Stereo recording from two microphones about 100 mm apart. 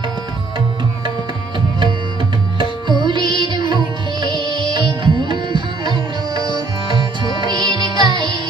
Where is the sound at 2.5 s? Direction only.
50° right (ahead or behind).